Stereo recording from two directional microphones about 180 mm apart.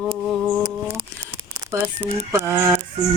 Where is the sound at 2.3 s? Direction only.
15° right (ahead or behind).